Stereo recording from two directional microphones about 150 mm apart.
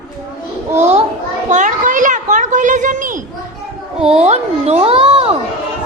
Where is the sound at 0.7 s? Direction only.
50° right (ahead or behind).